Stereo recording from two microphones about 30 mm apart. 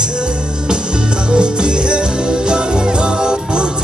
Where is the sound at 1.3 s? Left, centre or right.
Right.